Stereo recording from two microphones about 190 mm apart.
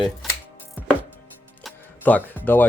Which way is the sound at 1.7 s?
10° left (ahead or behind).